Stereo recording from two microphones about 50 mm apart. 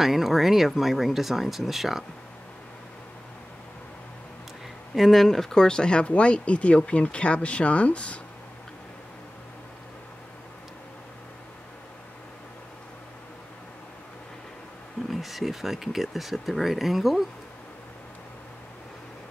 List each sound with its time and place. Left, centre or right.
0.0 s speech: centre
4.9 s speech: centre; by 8.2 s left
15.0 s speech: centre